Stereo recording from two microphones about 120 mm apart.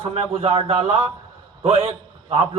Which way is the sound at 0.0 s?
55° right (ahead or behind).